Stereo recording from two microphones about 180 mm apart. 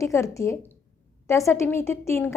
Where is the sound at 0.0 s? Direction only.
15° left (ahead or behind).